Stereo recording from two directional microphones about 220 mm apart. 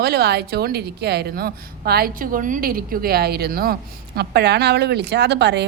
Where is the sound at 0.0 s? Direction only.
45° right (ahead or behind).